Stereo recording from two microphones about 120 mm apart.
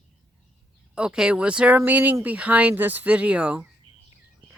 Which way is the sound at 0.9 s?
5° right (ahead or behind).